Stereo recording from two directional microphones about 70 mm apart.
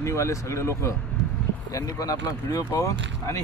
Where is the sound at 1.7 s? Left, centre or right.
Left.